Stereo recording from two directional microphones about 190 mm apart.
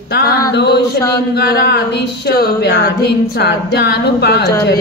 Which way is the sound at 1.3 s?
55° left (ahead or behind).